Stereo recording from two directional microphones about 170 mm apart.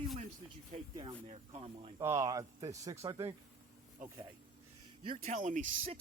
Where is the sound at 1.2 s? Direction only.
40° right (ahead or behind).